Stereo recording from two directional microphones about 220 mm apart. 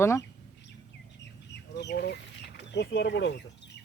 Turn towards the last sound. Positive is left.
turn(degrees=50)  # may be behind; listen again after turning